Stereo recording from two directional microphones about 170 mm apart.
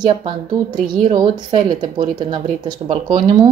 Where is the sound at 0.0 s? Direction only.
25° right (ahead or behind).